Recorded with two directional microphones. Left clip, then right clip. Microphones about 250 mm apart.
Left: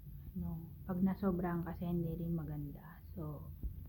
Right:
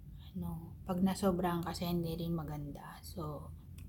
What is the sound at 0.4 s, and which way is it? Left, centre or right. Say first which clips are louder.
A woman's voice: right 5 dB; centre.